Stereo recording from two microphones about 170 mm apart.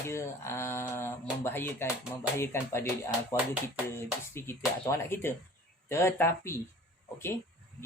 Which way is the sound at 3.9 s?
15° left (ahead or behind).